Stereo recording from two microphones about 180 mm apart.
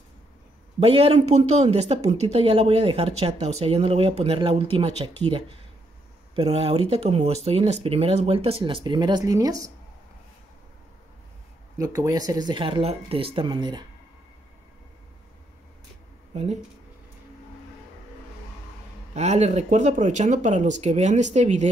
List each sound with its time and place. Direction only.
0.7 s a woman's voice: 30° right (ahead or behind)
11.8 s speech: 20° right (ahead or behind)
19.1 s a woman's voice: 40° right (ahead or behind)